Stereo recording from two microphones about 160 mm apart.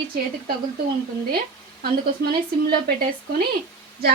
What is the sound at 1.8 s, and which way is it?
Speech, 70° right (ahead or behind).